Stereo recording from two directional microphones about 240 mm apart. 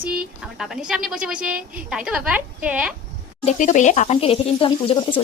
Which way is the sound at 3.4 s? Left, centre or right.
Left.